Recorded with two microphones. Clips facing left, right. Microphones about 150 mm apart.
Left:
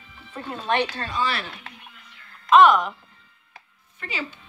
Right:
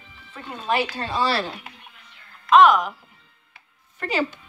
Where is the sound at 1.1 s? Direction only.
35° right (ahead or behind).